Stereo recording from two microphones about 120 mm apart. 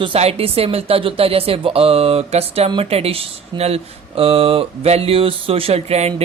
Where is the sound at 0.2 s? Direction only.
55° right (ahead or behind).